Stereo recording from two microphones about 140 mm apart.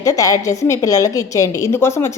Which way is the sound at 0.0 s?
25° left (ahead or behind).